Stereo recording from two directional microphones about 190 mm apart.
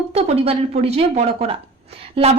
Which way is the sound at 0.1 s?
30° right (ahead or behind).